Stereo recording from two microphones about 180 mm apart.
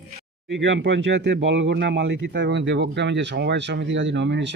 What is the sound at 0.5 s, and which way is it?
Speech, 85° right.